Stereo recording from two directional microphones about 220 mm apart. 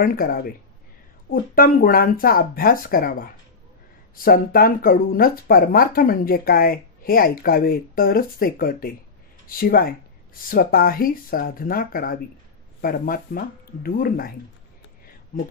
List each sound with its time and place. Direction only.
0.0 s speech: 40° left (ahead or behind)
15.3 s speech: 40° left (ahead or behind)